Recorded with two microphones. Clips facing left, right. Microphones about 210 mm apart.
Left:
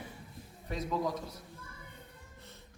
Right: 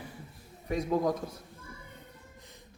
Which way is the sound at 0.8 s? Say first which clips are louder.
Right 5 dB; 50° right (ahead or behind).